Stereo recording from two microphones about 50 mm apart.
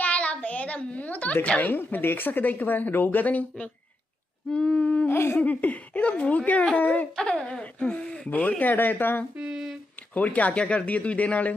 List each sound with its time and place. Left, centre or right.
0.0 s a sound: left
1.7 s speech: left
4.5 s speech: centre
5.1 s laughter: left
5.4 s speech: left
7.2 s speech: centre; by 9.2 s left
9.4 s a sound: centre
10.1 s speech: left